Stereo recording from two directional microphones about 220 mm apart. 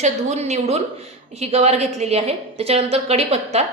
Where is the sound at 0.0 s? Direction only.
30° right (ahead or behind).